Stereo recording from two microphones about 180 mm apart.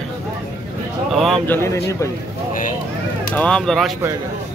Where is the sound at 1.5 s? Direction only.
15° left (ahead or behind).